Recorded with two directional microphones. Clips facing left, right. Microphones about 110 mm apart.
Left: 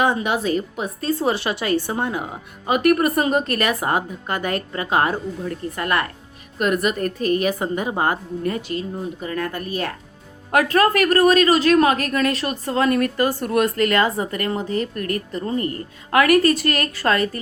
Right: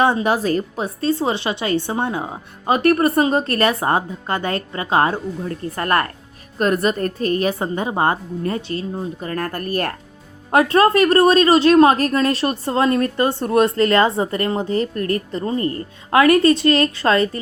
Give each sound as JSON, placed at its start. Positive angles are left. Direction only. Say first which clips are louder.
{"t": 0.0, "sound": "speech", "louder": "right 3 dB", "side_deg": -35}
{"t": 5.7, "sound": "a woman's voice", "louder": "right 4 dB", "side_deg": -40}
{"t": 9.2, "sound": "speech", "louder": "right 1 dB", "side_deg": -45}
{"t": 10.5, "sound": "speech", "louder": "right 3 dB", "side_deg": -30}